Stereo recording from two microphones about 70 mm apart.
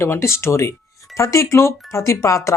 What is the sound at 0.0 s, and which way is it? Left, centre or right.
Speech, left.